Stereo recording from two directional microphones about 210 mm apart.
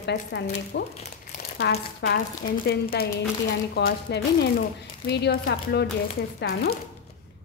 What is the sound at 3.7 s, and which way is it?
Speech, 50° left (ahead or behind).